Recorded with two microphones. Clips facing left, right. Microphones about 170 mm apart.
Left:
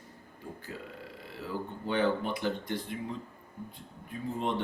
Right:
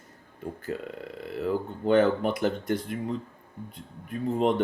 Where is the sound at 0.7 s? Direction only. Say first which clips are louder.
Right 11 dB; 60° right (ahead or behind).